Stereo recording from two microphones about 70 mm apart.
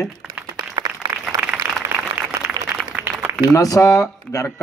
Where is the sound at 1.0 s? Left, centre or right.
Right.